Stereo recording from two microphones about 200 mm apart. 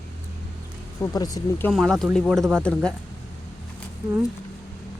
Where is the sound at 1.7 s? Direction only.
Centre (ahead or behind).